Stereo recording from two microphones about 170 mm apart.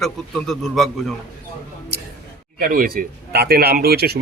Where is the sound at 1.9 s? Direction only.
70° right (ahead or behind).